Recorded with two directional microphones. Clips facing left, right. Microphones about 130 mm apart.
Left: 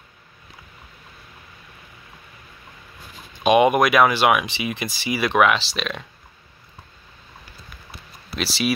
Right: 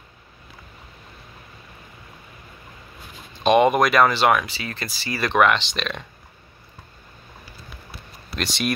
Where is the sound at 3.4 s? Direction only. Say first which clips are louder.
Left 1 dB; 5° left (ahead or behind).